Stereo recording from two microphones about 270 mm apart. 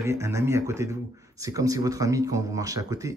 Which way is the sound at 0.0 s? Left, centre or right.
Centre.